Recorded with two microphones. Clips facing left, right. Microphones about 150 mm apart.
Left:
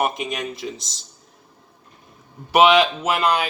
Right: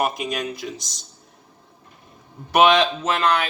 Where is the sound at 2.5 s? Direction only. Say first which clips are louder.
Left 1 dB; 5° left (ahead or behind).